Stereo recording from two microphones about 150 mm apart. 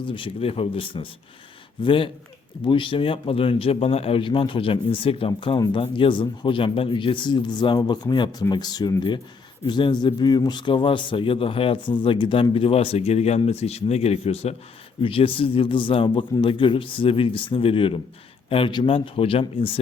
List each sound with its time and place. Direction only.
0.0 s a man's voice: 35° left (ahead or behind)
5.5 s a man's voice: 25° left (ahead or behind)